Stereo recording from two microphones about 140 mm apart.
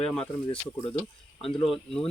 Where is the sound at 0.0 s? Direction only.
5° left (ahead or behind).